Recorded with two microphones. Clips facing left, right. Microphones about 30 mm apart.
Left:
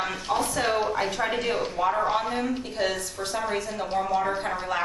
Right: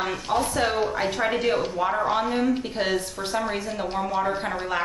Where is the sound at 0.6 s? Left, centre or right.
Centre.